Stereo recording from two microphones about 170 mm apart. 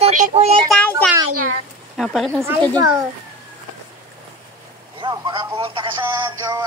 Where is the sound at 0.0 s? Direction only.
40° right (ahead or behind).